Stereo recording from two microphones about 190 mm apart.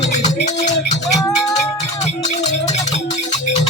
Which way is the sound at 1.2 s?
15° left (ahead or behind).